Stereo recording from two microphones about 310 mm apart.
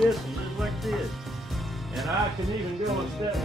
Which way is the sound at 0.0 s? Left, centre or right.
Centre.